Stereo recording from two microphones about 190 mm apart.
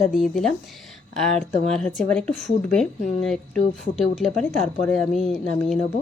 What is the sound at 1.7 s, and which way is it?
Speech, 5° left (ahead or behind).